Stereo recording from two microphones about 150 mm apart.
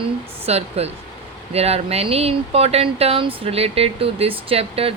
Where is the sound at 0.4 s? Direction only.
45° right (ahead or behind).